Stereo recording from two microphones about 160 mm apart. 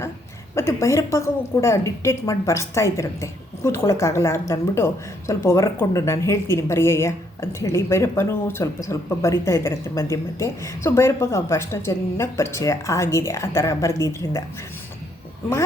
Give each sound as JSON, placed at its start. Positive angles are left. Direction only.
{"t": 0.5, "sound": "a woman's voice", "side_deg": 15}